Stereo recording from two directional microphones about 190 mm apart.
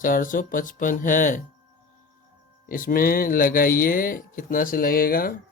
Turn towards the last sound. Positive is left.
turn(degrees=50)  # may be behind; listen again after turning